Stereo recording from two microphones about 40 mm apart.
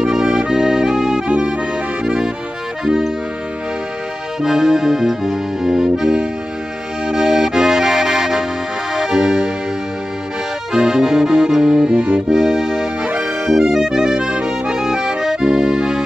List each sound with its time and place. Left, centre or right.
0.0 s accordion: centre
2.0 s music: centre
4.4 s accordion: centre
7.1 s music: centre
10.7 s accordion: centre
11.9 s music: right
12.3 s accordion: centre
13.1 s accordion: right
13.6 s accordion: centre